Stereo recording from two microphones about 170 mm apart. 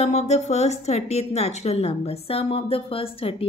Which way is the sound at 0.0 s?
40° left (ahead or behind).